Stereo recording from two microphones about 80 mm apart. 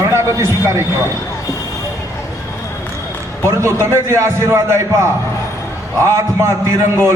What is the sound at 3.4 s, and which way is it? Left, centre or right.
A man's voice, right.